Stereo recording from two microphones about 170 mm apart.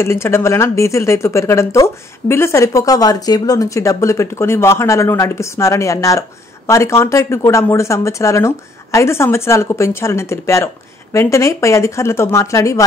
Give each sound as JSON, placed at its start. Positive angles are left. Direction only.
{"t": 0.0, "sound": "speech", "side_deg": 15}